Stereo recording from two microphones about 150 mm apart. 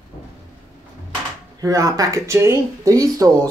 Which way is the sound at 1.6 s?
20° right (ahead or behind).